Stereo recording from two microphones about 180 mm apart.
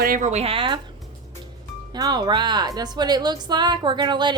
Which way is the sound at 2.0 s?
20° right (ahead or behind).